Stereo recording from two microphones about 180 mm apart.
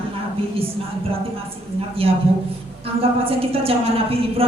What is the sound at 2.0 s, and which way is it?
Speech, 30° right (ahead or behind).